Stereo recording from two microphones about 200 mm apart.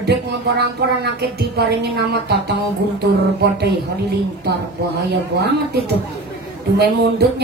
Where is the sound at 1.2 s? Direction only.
55° right (ahead or behind).